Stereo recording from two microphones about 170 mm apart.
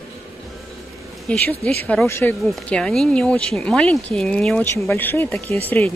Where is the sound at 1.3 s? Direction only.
5° left (ahead or behind).